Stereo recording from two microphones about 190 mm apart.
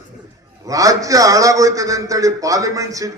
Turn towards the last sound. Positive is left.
turn(degrees=-15)  # may be behind; listen again after turning